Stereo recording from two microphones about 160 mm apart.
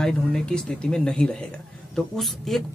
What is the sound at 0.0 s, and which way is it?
A man's voice, 5° left (ahead or behind).